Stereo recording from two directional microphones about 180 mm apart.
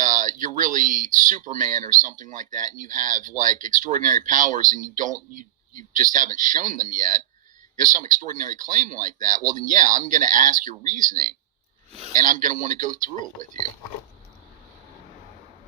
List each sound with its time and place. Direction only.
0.0 s speech: 45° right (ahead or behind)